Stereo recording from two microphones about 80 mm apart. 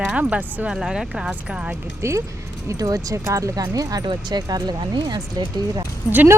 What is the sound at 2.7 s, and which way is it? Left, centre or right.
Speech, right.